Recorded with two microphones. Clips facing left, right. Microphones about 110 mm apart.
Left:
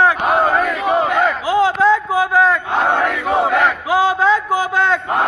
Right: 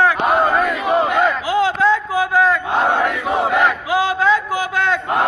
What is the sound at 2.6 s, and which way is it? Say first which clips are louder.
Speech: even; 10° right (ahead or behind).